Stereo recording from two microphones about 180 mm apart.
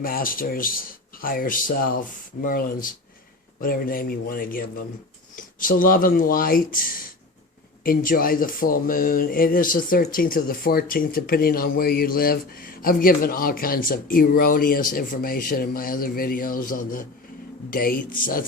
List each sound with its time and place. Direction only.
0.0 s speech: 50° left (ahead or behind)